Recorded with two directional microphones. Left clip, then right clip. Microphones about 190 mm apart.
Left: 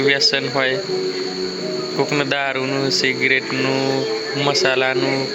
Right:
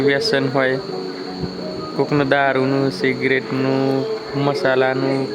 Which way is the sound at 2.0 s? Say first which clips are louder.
Right 3 dB; 20° right (ahead or behind).